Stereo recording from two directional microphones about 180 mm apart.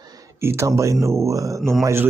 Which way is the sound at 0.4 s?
15° right (ahead or behind).